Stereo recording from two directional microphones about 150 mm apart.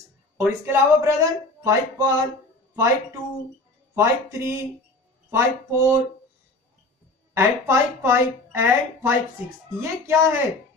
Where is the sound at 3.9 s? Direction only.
15° right (ahead or behind).